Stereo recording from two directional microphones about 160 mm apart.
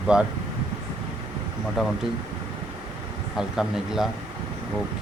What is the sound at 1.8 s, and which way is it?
Speech, centre (ahead or behind).